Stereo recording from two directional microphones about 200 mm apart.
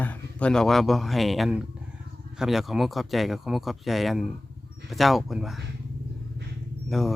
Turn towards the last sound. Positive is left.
turn(degrees=0)  # may be behind; listen again after turning